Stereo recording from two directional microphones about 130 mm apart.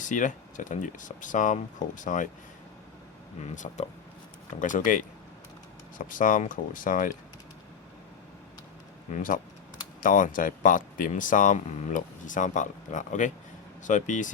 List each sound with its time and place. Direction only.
0.0 s speech: 80° left
3.5 s speech: 75° left (ahead or behind)
6.1 s speech: 90° left
9.1 s speech: 90° left; by 14.3 s 75° left (ahead or behind)